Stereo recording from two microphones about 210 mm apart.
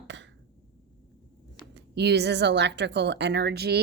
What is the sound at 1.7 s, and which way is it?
Speech, 50° right (ahead or behind).